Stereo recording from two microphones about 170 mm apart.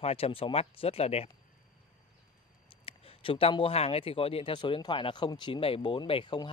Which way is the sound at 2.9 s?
35° left (ahead or behind).